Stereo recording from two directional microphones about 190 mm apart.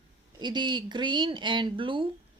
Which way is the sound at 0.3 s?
25° right (ahead or behind).